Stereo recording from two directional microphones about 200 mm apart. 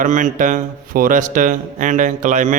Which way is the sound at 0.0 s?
40° right (ahead or behind).